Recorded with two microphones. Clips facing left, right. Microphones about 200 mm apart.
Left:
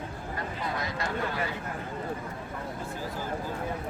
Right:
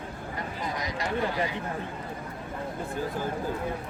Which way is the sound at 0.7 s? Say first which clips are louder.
Right 3 dB; 15° right (ahead or behind).